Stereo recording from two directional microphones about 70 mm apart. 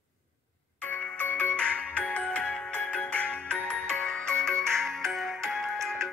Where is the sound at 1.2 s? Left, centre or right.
Left.